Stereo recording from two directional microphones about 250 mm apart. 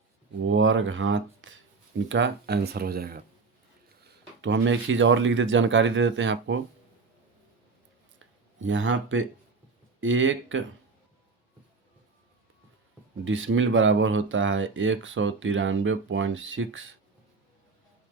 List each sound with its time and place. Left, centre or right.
0.4 s speech: right
8.2 s speech: right
13.2 s speech: right